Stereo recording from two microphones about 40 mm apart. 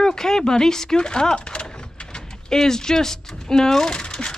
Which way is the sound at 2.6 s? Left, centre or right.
Centre.